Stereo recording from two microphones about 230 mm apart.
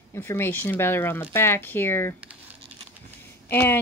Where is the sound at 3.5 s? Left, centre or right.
Centre.